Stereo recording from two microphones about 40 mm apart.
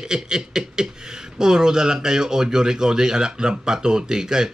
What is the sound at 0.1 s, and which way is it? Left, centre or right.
Speech, centre.